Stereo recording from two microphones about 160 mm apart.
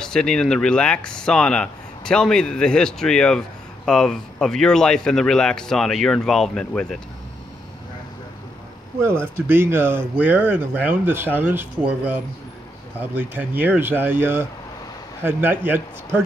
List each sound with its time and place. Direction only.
0.0 s speech: 5° left (ahead or behind)
9.0 s speech: 15° right (ahead or behind)